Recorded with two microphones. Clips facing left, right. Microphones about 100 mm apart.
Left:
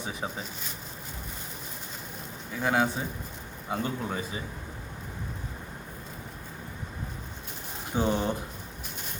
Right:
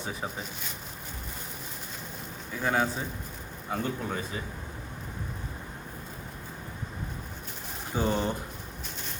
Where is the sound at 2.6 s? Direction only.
15° left (ahead or behind).